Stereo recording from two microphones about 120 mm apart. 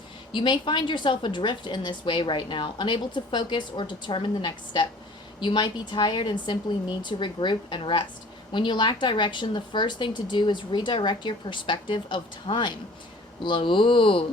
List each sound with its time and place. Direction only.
0.3 s a woman's voice: 40° left (ahead or behind)